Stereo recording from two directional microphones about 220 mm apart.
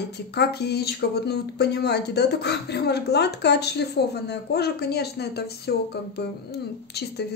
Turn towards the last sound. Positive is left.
turn(degrees=45)  # may be behind; listen again after turning